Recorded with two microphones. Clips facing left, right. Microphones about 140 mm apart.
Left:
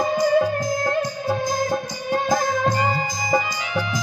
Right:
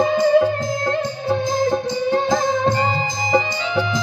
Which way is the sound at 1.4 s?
25° right (ahead or behind).